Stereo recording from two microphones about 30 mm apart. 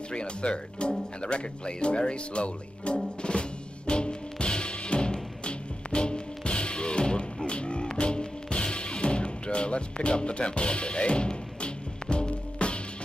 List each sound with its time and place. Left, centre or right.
0.1 s speech: left
3.2 s music: left